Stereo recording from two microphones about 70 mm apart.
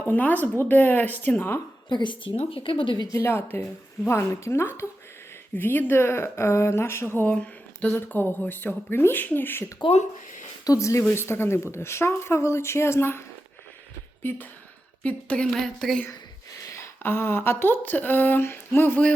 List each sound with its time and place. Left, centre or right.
0.0 s speech: left
1.9 s a woman's voice: left
3.2 s speech: left
7.2 s speech: centre
7.9 s speech: left
10.6 s a woman's voice: left
11.1 s speech: left
15.0 s speech: centre
15.5 s speech: centre
16.6 s a sound: left
17.0 s speech: left